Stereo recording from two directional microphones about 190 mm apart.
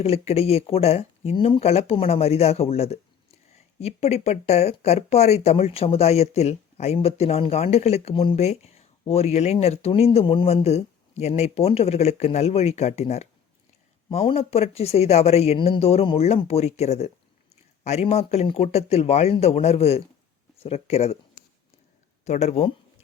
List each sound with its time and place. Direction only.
0.0 s speech: 30° left (ahead or behind)
22.2 s speech: 35° left (ahead or behind)